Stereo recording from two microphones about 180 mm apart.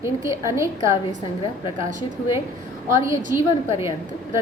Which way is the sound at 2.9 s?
15° right (ahead or behind).